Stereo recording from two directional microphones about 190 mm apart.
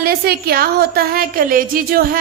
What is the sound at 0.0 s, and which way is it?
A woman's voice, 55° right (ahead or behind).